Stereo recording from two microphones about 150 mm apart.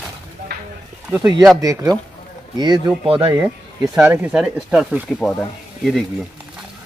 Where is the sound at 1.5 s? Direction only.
25° right (ahead or behind).